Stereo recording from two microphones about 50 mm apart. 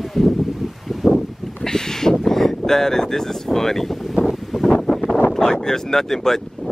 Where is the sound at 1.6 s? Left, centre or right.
Centre.